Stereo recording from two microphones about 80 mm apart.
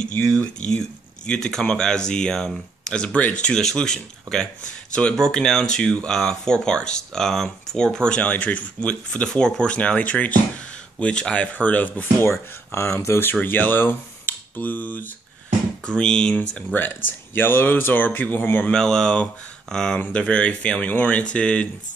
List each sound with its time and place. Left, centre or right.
0.6 s speech: centre
15.9 s speech: centre
16.3 s speech: left
18.7 s speech: centre